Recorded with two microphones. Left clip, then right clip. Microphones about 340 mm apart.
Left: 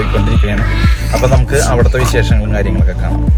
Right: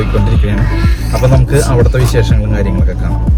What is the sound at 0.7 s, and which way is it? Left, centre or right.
Speech, centre.